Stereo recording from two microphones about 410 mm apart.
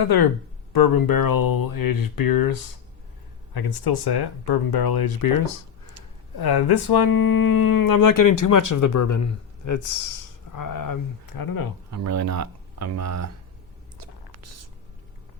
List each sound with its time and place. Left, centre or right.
0.0 s speech: left
6.3 s speech: left
11.9 s speech: right
14.0 s a sound: right